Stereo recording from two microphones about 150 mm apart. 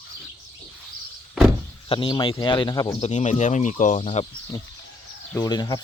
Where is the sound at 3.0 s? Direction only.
50° left (ahead or behind).